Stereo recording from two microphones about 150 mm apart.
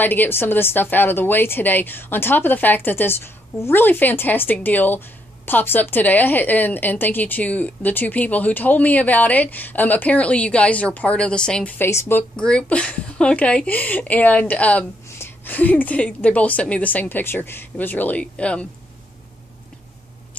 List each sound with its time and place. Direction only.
0.0 s a woman's voice: 15° left (ahead or behind)